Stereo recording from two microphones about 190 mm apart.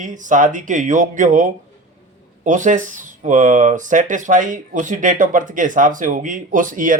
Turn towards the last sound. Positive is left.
turn(degrees=-45)  # may be behind; listen again after turning